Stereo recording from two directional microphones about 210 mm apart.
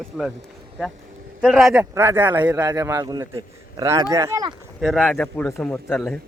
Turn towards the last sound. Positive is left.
turn(degrees=0)  # may be behind; listen again after turning